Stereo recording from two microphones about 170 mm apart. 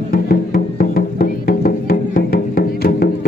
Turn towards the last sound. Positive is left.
turn(degrees=65)  # may be behind; listen again after turning